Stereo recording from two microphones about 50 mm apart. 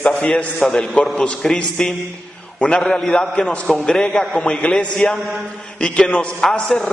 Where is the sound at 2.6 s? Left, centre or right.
Centre.